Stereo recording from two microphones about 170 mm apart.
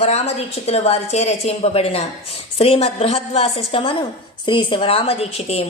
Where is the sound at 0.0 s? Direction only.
40° left (ahead or behind).